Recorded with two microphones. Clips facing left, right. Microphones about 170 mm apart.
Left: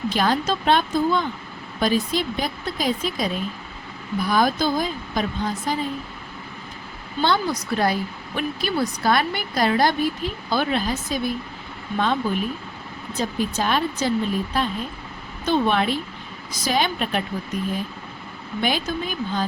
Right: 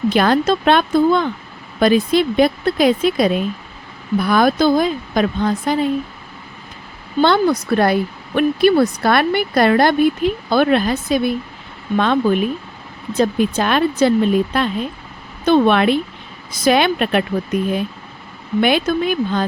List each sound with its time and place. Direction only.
0.1 s a woman's voice: 65° right (ahead or behind)
7.2 s a woman's voice: 60° right (ahead or behind)